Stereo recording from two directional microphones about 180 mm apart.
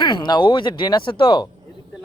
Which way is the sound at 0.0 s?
25° left (ahead or behind).